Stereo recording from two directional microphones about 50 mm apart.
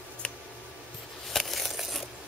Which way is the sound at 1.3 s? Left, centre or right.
Centre.